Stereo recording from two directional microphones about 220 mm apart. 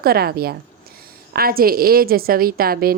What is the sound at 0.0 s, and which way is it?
A woman's voice, 45° right (ahead or behind).